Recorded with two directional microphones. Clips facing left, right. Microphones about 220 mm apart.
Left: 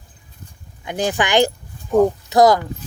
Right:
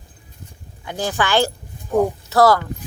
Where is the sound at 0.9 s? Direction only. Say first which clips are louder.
Left 2 dB; 20° left (ahead or behind).